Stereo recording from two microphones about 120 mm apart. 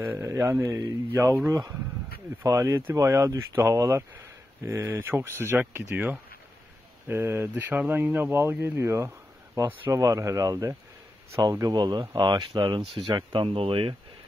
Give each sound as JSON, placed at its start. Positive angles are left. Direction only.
{"t": 0.0, "sound": "speech", "side_deg": -20}
{"t": 13.5, "sound": "speech", "side_deg": -55}